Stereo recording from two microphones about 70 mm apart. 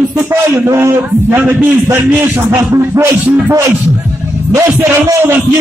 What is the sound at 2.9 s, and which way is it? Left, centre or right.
Speech, right.